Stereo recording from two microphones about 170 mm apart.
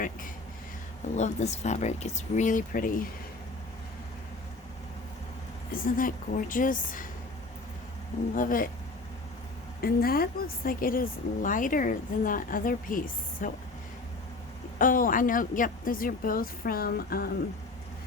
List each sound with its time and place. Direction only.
1.1 s speech: 45° left (ahead or behind)
5.7 s speech: 55° left (ahead or behind)
8.4 s a woman's voice: 55° left (ahead or behind)
9.8 s speech: 60° left (ahead or behind)
14.8 s a woman's voice: 55° left (ahead or behind)